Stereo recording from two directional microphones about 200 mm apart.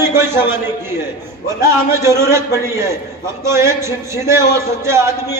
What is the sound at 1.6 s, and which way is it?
A man's voice, 15° right (ahead or behind).